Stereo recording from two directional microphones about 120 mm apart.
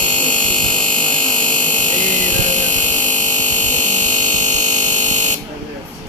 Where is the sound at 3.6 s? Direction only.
90° right.